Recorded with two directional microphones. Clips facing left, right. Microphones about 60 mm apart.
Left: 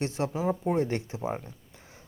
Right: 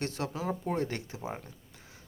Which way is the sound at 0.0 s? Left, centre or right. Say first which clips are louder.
Left 5 dB; left.